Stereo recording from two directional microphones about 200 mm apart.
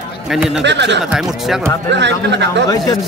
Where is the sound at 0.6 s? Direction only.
60° right (ahead or behind).